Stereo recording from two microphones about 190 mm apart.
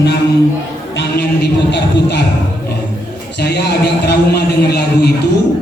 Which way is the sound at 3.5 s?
60° left (ahead or behind).